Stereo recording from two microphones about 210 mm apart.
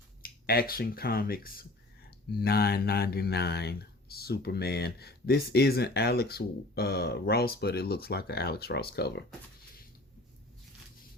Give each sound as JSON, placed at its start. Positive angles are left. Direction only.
{"t": 0.2, "sound": "speech", "side_deg": 45}